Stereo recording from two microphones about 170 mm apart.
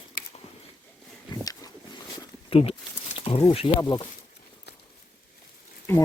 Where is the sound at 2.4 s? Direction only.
35° left (ahead or behind).